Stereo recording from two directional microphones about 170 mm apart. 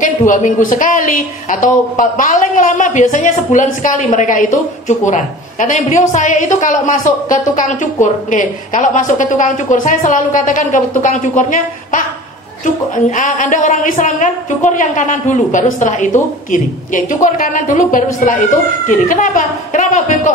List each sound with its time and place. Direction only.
0.3 s a woman's voice: 50° left (ahead or behind)